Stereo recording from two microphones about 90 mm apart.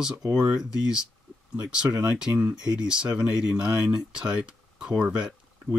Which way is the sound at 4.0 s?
10° right (ahead or behind).